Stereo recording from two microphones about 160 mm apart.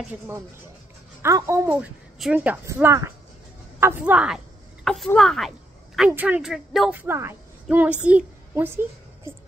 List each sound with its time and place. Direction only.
1.2 s a woman's voice: 20° right (ahead or behind)
1.7 s a woman's voice: 5° right (ahead or behind)
5.9 s a woman's voice: 10° right (ahead or behind)